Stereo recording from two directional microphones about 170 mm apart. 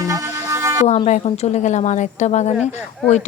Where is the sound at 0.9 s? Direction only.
40° left (ahead or behind).